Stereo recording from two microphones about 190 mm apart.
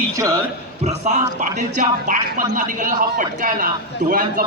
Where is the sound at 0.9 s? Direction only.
35° right (ahead or behind).